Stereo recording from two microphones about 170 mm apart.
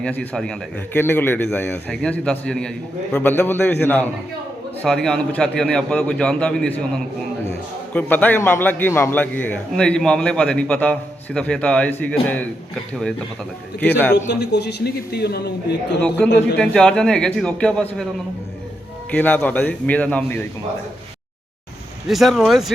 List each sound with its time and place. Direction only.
0.0 s a man's voice: 5° left (ahead or behind)
14.3 s a man's voice: 80° left
16.2 s a man's voice: 5° left (ahead or behind)
19.1 s a man's voice: 5° left (ahead or behind)
22.0 s a man's voice: centre (ahead or behind)